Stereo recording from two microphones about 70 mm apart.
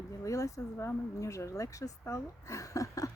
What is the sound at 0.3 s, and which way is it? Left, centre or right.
Speech, left.